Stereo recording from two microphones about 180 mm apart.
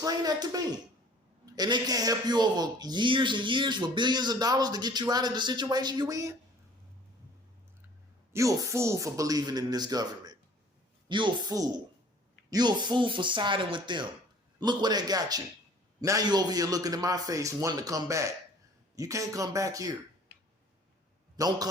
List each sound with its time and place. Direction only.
0.0 s a man's voice: 20° right (ahead or behind)
8.3 s a man's voice: 15° right (ahead or behind)
21.3 s a man's voice: 20° right (ahead or behind)